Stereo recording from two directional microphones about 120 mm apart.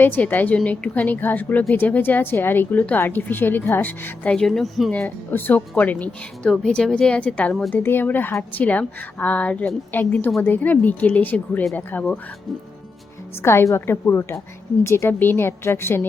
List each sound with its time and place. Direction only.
0.0 s speech: 15° left (ahead or behind)
5.0 s speech: 15° left (ahead or behind)
13.4 s a woman's voice: 20° left (ahead or behind)